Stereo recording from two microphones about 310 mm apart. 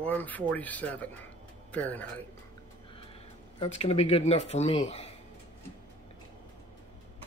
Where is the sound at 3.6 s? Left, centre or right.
Centre.